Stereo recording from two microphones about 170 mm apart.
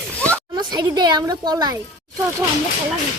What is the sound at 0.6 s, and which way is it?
A child's voice, 25° right (ahead or behind).